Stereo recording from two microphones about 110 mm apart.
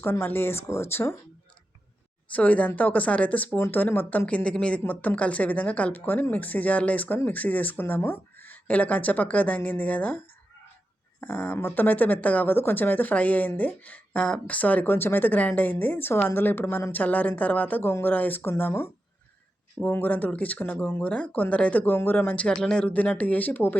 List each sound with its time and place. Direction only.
0.0 s speech: 20° left (ahead or behind)
2.3 s speech: 15° left (ahead or behind)
11.2 s speech: 15° left (ahead or behind)